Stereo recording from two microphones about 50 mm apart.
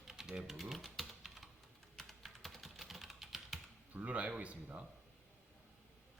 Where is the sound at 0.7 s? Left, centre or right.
Centre.